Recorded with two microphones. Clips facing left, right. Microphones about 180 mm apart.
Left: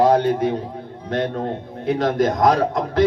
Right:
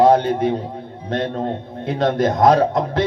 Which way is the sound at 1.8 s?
25° right (ahead or behind).